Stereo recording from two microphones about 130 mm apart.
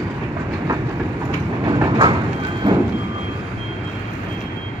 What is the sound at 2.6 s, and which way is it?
Vehicle, 30° right (ahead or behind).